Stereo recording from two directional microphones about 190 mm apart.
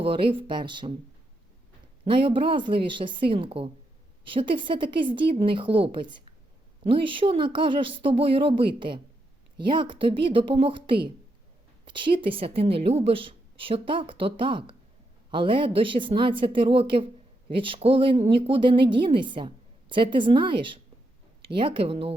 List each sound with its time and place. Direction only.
0.0 s speech: 25° right (ahead or behind)
2.0 s speech: 25° right (ahead or behind)